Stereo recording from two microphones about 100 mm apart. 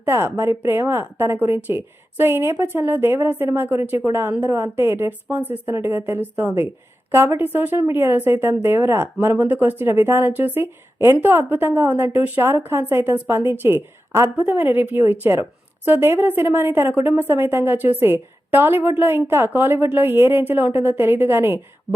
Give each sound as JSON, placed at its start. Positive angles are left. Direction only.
{"t": 0.0, "sound": "speech", "side_deg": -25}